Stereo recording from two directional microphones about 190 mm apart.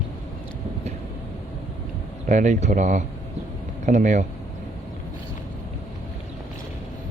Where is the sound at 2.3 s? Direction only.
40° right (ahead or behind).